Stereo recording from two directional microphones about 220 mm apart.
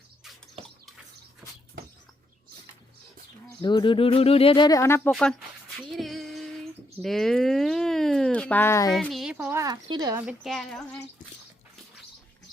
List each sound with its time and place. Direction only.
3.6 s speech: 20° left (ahead or behind)
5.7 s female singing: centre (ahead or behind)
7.0 s a sound: centre (ahead or behind); by 10.2 s 15° right (ahead or behind)
10.2 s a woman's voice: centre (ahead or behind)